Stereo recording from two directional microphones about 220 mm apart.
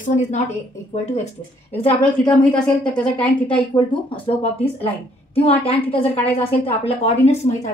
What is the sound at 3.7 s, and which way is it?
Speech, 25° left (ahead or behind).